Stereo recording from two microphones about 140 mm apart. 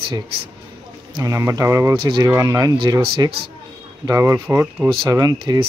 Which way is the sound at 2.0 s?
35° right (ahead or behind).